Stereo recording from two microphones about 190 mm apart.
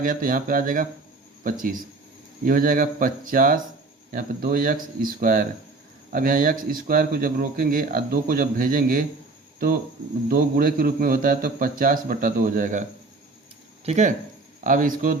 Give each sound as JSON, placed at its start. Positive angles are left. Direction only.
{"t": 0.0, "sound": "a man's voice", "side_deg": -45}
{"t": 10.2, "sound": "a man's voice", "side_deg": -50}
{"t": 13.8, "sound": "a man's voice", "side_deg": -35}